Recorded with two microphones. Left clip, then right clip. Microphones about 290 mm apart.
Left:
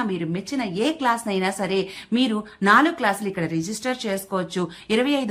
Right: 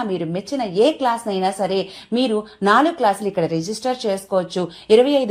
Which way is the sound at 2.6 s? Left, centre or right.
Centre.